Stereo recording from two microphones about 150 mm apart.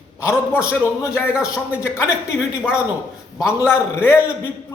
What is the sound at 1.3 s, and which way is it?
Speech, 5° right (ahead or behind).